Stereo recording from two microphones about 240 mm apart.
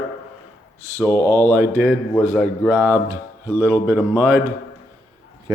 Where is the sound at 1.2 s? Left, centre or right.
Centre.